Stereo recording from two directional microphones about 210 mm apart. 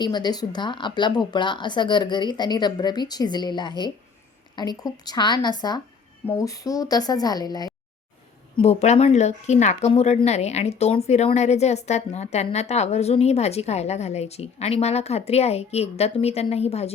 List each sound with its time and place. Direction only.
0.0 s a woman's voice: 20° left (ahead or behind)
8.5 s speech: 30° left (ahead or behind)